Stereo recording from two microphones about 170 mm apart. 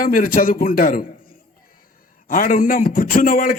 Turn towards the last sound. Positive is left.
turn(degrees=50)  # may be behind; listen again after turning